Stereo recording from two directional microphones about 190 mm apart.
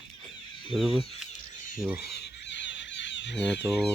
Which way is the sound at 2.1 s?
65° left (ahead or behind).